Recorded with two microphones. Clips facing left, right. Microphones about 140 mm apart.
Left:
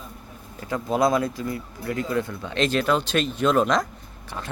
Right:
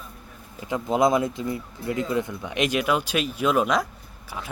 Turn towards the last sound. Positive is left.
turn(degrees=-10)  # may be behind; listen again after turning